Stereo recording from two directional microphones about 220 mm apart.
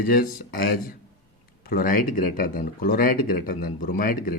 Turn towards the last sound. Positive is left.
turn(degrees=40)  # may be behind; listen again after turning